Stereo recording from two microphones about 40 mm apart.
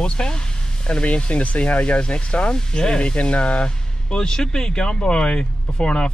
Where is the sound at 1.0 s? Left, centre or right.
Left.